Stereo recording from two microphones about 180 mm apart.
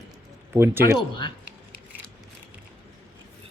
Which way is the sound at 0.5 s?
15° right (ahead or behind).